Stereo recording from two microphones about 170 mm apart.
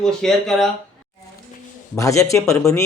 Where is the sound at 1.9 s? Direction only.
20° left (ahead or behind).